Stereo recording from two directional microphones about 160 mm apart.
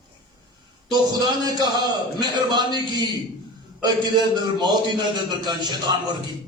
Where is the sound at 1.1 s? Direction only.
25° right (ahead or behind).